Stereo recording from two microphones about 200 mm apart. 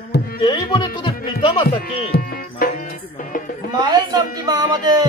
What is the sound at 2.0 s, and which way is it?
Music, 50° left (ahead or behind).